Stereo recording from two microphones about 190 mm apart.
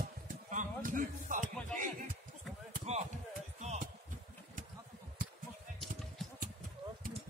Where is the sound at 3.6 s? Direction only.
35° right (ahead or behind).